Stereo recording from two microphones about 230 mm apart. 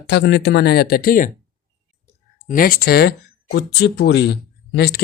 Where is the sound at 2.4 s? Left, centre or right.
Left.